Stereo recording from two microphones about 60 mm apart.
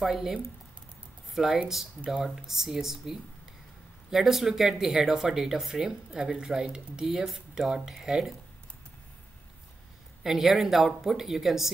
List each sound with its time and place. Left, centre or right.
0.0 s a woman's voice: centre
10.2 s a woman's voice: centre